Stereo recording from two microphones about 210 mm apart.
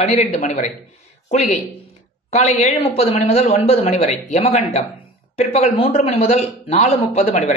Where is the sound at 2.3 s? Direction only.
30° left (ahead or behind).